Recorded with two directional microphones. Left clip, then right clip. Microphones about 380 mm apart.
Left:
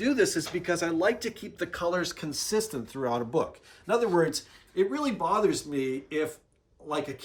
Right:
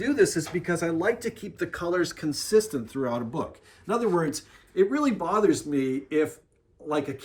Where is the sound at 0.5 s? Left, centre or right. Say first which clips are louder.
Right 1 dB; left.